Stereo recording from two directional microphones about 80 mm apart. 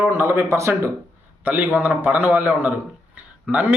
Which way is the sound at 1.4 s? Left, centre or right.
Centre.